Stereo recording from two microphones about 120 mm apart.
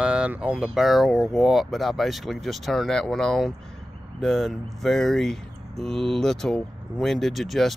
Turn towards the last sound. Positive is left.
turn(degrees=0)  # may be behind; listen again after turning